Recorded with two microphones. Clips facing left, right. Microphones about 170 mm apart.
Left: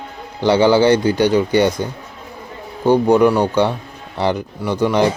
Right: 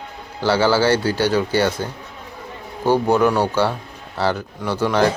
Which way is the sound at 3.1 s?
10° left (ahead or behind).